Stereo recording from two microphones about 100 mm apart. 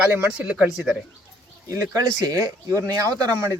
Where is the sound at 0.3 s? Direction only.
10° right (ahead or behind).